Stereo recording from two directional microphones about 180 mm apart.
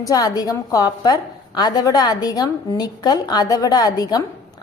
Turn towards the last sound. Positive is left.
turn(degrees=20)  # may be behind; listen again after turning